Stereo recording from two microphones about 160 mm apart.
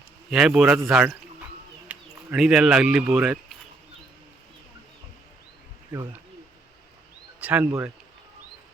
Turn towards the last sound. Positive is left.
turn(degrees=-10)  # may be behind; listen again after turning